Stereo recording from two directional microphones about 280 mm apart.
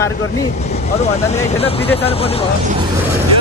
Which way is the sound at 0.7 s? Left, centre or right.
Left.